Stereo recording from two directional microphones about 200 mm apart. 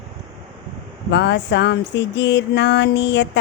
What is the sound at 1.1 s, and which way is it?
Music, 60° left (ahead or behind).